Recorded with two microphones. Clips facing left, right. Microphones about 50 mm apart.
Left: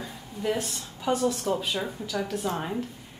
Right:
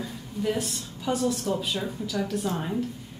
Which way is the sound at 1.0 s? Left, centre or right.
Centre.